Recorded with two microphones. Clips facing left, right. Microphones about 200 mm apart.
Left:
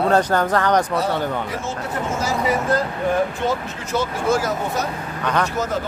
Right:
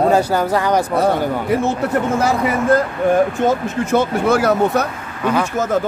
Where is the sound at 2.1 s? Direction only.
60° right (ahead or behind).